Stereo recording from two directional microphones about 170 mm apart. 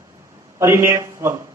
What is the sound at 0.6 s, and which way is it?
Speech, 15° right (ahead or behind).